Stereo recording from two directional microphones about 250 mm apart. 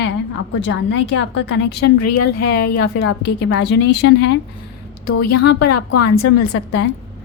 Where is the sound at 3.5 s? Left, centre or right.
Left.